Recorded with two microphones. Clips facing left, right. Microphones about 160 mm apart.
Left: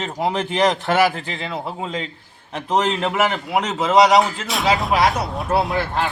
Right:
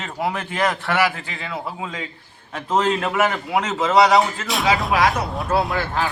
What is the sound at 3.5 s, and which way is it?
Speech, 10° left (ahead or behind).